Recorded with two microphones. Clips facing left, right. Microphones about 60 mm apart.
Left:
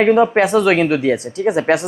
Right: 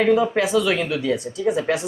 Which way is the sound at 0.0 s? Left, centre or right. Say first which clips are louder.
Left 5 dB; left.